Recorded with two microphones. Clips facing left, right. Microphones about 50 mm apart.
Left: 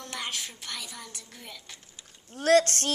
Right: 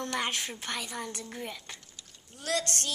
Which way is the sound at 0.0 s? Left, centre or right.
Right.